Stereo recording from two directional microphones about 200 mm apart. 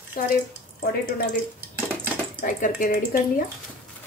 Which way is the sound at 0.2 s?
45° left (ahead or behind).